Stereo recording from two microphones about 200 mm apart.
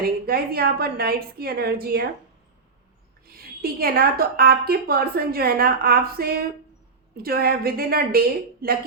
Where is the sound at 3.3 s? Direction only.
50° right (ahead or behind).